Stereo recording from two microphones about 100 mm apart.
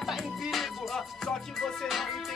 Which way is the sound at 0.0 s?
Centre (ahead or behind).